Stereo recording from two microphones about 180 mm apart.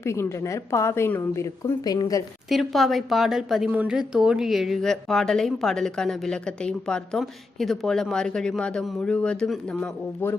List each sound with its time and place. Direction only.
0.0 s a woman's voice: 15° left (ahead or behind)
2.5 s speech: centre (ahead or behind)